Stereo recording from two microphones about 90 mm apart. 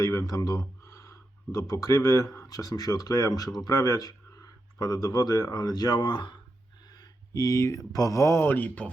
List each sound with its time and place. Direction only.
0.0 s speech: 35° left (ahead or behind); by 6.4 s 55° left (ahead or behind)
6.9 s speech: 45° left (ahead or behind); by 8.9 s 15° left (ahead or behind)